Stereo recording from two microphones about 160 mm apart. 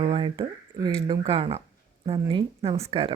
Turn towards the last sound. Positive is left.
turn(degrees=-35)  # may be behind; listen again after turning